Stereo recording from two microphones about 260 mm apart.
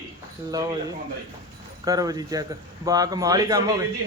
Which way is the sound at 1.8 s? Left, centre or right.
Centre.